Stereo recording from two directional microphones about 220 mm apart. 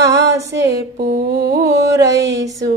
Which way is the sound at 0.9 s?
45° right (ahead or behind).